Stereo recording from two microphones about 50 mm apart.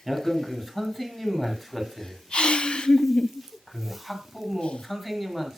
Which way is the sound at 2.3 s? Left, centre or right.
Centre.